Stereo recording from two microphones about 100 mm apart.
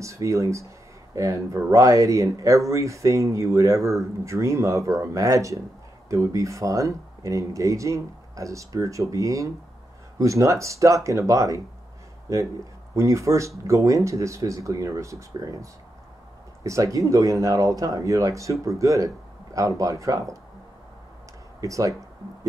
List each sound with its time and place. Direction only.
0.0 s speech: 30° right (ahead or behind)
21.5 s speech: 35° right (ahead or behind)